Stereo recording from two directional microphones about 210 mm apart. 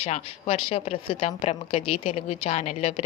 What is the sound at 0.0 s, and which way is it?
A woman's voice, 30° left (ahead or behind).